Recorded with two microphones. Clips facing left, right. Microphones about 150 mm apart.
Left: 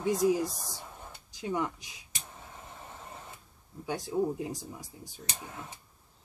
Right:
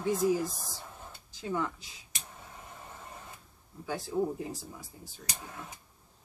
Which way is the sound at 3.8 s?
20° left (ahead or behind).